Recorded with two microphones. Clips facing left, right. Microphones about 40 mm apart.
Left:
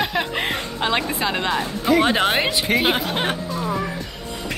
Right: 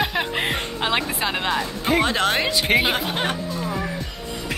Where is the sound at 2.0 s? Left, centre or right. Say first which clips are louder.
Left 2 dB; centre.